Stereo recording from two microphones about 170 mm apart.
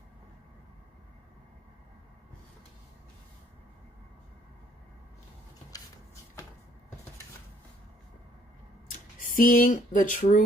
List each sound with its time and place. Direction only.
5.7 s rub: 20° left (ahead or behind)
9.2 s speech: 55° left (ahead or behind)